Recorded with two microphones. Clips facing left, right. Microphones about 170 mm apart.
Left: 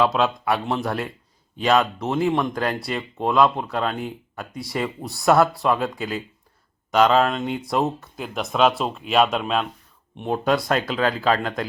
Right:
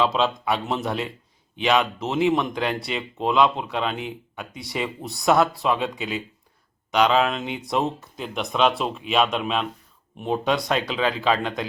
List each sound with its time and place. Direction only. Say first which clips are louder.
0.0 s speech: left 2 dB; centre (ahead or behind)